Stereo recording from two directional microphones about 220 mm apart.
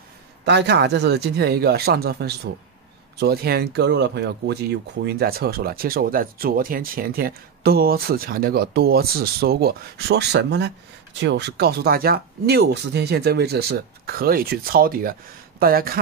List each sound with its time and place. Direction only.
0.5 s speech: 50° right (ahead or behind)